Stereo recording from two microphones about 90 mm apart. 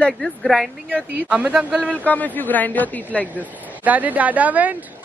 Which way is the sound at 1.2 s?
15° right (ahead or behind).